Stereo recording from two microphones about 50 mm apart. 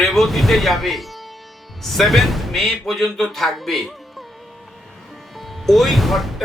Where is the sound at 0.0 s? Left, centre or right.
Centre.